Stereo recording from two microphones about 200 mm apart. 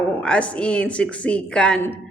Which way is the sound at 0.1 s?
5° left (ahead or behind).